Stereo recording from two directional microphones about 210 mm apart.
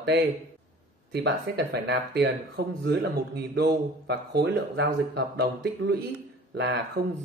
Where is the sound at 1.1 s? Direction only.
55° right (ahead or behind).